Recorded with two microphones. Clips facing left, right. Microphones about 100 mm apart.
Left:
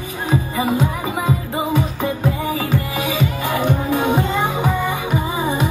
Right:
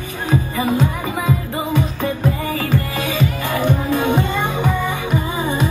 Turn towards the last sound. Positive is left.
turn(degrees=15)  # may be behind; listen again after turning